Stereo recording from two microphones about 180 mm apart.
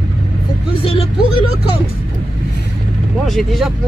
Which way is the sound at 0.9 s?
30° left (ahead or behind).